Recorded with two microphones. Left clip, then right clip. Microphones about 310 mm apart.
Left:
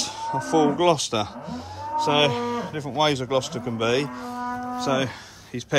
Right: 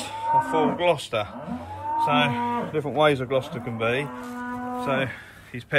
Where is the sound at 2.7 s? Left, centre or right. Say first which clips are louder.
Right 2 dB; left.